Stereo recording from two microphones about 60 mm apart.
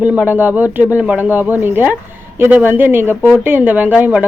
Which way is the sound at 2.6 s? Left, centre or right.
Right.